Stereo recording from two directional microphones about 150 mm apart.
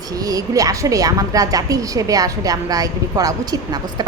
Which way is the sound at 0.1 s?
25° right (ahead or behind).